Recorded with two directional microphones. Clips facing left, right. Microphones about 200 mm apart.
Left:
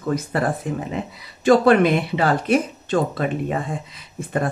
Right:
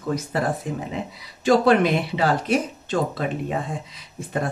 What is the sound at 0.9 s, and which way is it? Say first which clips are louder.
Speech: left 2 dB; 55° left (ahead or behind).